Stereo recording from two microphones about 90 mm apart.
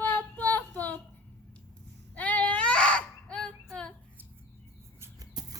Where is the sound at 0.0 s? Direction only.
20° left (ahead or behind).